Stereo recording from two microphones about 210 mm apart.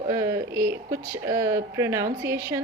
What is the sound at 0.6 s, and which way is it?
Speech, 45° right (ahead or behind).